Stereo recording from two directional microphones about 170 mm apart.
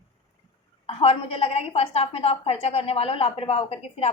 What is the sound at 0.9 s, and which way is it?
A woman's voice, 35° left (ahead or behind).